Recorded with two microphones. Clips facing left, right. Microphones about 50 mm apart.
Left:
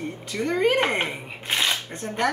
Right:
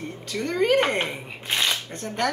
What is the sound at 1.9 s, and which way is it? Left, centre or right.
Speech, left.